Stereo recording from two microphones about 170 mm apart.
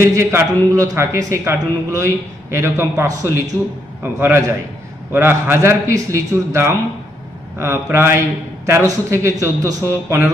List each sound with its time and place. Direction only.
0.0 s a man's voice: 15° right (ahead or behind)